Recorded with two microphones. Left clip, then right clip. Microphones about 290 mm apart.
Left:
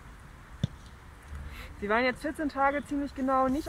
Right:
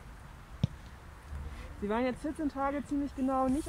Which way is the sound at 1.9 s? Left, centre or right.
Left.